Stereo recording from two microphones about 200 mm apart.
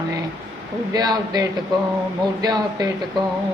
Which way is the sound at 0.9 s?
20° right (ahead or behind).